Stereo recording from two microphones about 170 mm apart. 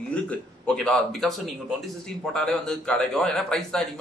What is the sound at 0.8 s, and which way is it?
A man's voice, centre (ahead or behind).